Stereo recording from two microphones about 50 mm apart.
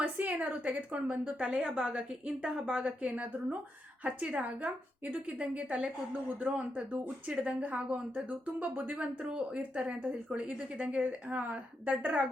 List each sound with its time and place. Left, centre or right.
0.0 s a woman's voice: right
0.9 s a woman's voice: right
9.0 s a woman's voice: right